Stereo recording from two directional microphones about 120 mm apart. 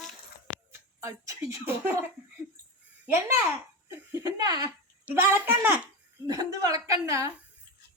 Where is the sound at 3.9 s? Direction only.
30° right (ahead or behind).